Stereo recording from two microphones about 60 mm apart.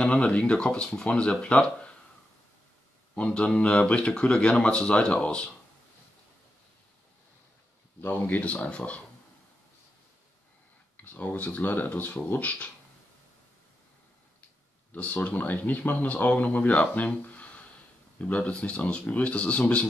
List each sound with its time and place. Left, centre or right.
0.0 s speech: centre
3.2 s speech: centre
8.0 s speech: left
11.1 s speech: left
14.9 s speech: left